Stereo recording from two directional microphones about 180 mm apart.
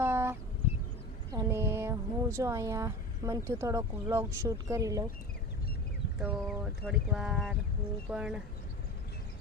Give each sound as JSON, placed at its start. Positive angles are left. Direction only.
{"t": 0.0, "sound": "a sound", "side_deg": -15}
{"t": 1.3, "sound": "speech", "side_deg": -15}
{"t": 6.1, "sound": "speech", "side_deg": -5}